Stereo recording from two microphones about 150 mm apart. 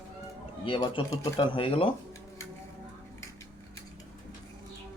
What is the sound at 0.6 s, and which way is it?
Speech, 35° left (ahead or behind).